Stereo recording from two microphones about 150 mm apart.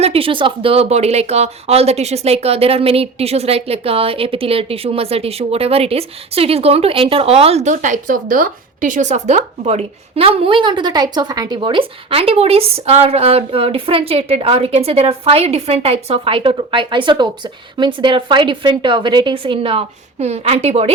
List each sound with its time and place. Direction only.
0.0 s speech: 40° right (ahead or behind)